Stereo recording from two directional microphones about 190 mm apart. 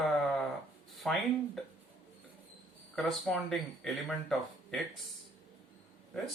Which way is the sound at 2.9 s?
Centre (ahead or behind).